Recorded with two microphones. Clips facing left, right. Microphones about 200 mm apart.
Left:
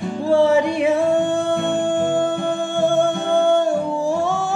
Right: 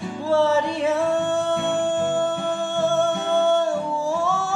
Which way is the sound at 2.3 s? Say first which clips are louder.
Left 3 dB; 50° left (ahead or behind).